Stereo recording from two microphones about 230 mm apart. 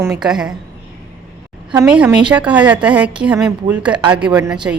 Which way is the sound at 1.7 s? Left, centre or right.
Centre.